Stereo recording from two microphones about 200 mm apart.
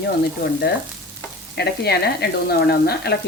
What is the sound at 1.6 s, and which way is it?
Speech, 55° left (ahead or behind).